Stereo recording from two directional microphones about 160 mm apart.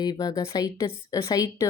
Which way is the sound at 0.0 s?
25° left (ahead or behind).